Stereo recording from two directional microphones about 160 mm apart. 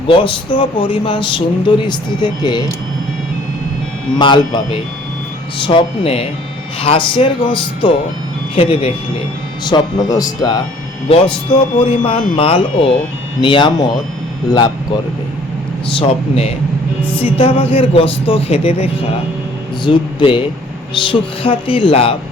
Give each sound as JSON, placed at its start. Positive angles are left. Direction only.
{"t": 0.1, "sound": "speech", "side_deg": 35}
{"t": 4.2, "sound": "speech", "side_deg": 30}
{"t": 9.6, "sound": "speech", "side_deg": 25}
{"t": 11.1, "sound": "speech", "side_deg": 35}
{"t": 15.9, "sound": "speech", "side_deg": 40}